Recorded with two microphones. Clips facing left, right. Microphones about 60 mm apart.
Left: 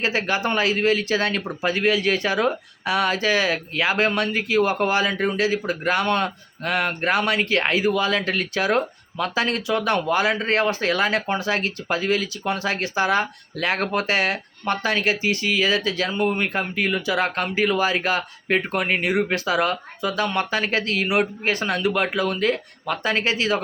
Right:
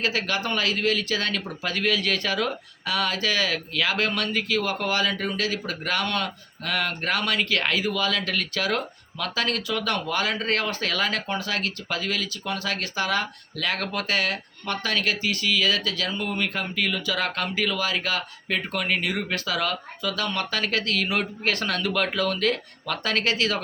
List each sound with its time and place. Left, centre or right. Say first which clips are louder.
0.0 s speech: left 4 dB; left